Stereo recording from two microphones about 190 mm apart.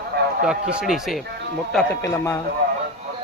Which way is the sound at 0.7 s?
Centre (ahead or behind).